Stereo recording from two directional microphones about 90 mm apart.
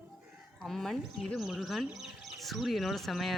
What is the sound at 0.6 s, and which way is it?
Speech, 5° left (ahead or behind).